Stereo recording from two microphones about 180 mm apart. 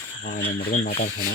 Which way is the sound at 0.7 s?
45° left (ahead or behind).